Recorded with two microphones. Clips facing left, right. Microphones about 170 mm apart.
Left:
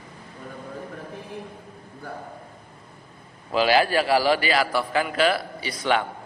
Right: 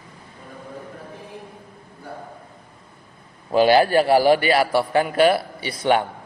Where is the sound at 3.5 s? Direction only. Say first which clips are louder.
Right 5 dB; 25° right (ahead or behind).